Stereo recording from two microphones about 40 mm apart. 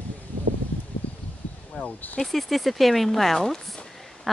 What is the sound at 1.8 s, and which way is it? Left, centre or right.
Speech, left.